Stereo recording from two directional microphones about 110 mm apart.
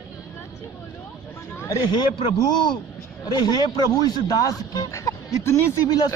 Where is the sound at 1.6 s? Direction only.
30° left (ahead or behind).